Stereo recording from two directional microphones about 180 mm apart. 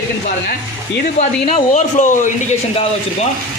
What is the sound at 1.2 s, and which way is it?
Speech, 35° left (ahead or behind).